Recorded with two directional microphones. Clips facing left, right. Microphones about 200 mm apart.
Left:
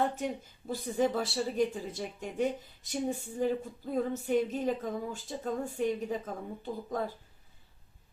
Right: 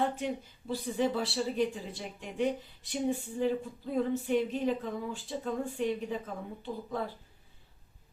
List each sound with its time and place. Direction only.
0.7 s speech: 45° left (ahead or behind)